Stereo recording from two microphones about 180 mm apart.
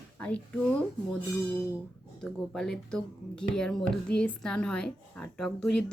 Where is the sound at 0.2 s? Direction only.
5° left (ahead or behind).